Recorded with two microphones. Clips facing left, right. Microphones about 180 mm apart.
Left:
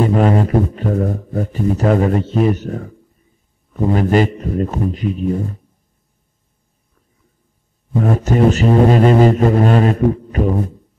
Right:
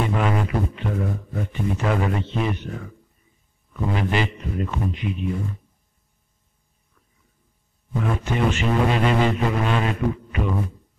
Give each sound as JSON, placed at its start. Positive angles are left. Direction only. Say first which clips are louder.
{"t": 0.0, "sound": "a man's voice", "louder": "left 9 dB", "side_deg": 40}
{"t": 7.9, "sound": "a man's voice", "louder": "left 8 dB", "side_deg": 40}